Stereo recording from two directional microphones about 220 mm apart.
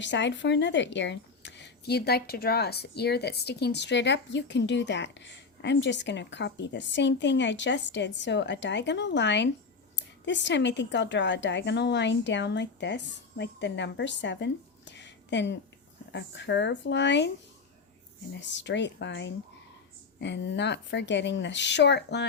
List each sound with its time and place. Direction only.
0.0 s speech: 55° left (ahead or behind)
18.3 s speech: 55° left (ahead or behind)